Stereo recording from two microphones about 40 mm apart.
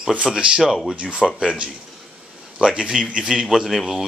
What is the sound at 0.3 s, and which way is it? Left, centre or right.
Speech, centre.